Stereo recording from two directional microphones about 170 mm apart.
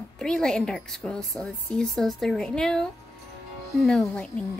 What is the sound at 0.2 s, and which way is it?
A woman's voice, 5° left (ahead or behind).